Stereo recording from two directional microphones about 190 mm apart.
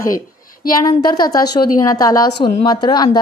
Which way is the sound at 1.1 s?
20° left (ahead or behind).